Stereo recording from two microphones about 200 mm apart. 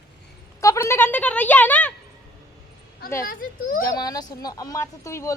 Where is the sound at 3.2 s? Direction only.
45° left (ahead or behind).